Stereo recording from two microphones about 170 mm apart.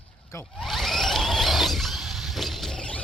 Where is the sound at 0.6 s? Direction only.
Centre (ahead or behind).